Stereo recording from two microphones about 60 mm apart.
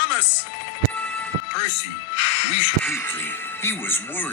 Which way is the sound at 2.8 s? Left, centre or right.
Left.